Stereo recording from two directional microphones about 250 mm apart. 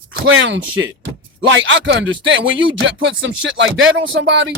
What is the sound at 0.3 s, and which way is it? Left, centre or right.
Music, right.